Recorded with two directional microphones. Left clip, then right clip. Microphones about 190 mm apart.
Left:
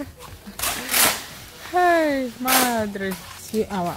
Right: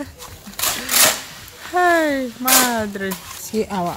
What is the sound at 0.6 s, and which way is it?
Sewing machine, 30° right (ahead or behind).